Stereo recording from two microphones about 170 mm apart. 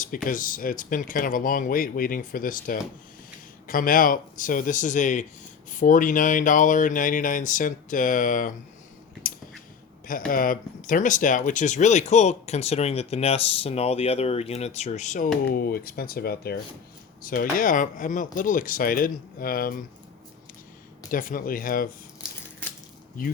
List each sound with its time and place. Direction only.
0.3 s speech: 55° left (ahead or behind)
10.1 s speech: 55° left (ahead or behind)
15.4 s speech: 60° left (ahead or behind)
17.2 s speech: 55° left (ahead or behind)
21.1 s speech: 55° left (ahead or behind)